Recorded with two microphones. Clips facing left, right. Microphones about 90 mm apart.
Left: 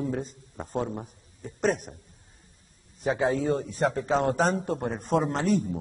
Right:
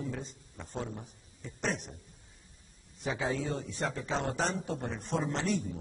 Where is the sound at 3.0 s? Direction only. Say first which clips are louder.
Left 8 dB; 50° left (ahead or behind).